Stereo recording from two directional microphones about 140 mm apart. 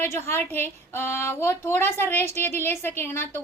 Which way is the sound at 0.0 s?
15° left (ahead or behind).